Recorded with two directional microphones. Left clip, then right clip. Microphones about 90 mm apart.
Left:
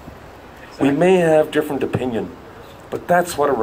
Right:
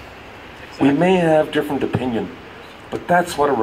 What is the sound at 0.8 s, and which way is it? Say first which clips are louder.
Speech: left 1 dB; 15° left (ahead or behind).